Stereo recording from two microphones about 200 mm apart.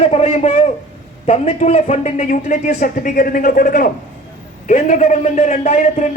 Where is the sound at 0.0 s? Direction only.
30° left (ahead or behind).